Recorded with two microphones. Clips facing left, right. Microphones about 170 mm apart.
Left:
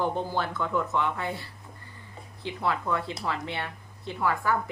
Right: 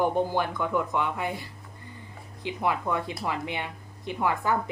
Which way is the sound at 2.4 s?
15° right (ahead or behind).